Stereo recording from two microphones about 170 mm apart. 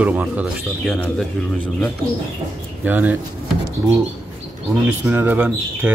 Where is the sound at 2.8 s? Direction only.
10° right (ahead or behind).